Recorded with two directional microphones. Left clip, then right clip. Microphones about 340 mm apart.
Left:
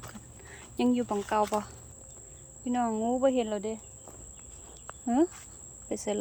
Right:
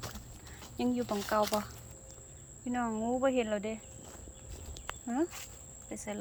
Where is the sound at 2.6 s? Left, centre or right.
Centre.